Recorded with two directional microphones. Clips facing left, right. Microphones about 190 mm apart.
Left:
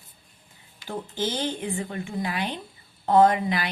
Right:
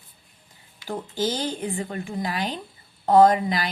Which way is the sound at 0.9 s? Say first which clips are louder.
Right 3 dB; 40° right (ahead or behind).